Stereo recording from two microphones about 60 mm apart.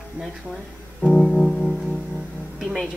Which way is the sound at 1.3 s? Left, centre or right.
Centre.